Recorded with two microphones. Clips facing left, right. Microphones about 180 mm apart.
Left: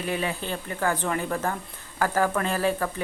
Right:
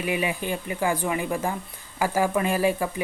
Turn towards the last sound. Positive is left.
turn(degrees=-10)  # may be behind; listen again after turning